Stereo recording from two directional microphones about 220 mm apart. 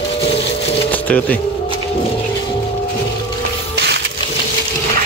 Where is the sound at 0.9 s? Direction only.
5° left (ahead or behind).